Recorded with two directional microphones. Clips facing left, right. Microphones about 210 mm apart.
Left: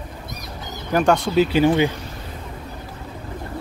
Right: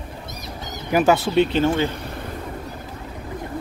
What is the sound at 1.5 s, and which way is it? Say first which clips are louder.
Speech: left 3 dB; 10° left (ahead or behind).